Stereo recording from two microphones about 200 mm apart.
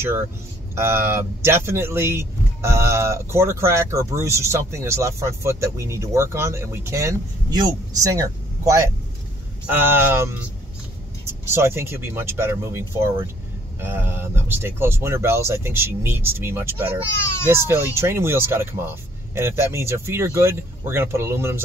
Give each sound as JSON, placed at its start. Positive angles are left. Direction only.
{"t": 0.7, "sound": "speech", "side_deg": -10}